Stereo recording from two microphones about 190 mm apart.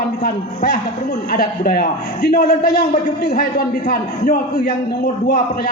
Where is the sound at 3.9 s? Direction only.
50° left (ahead or behind).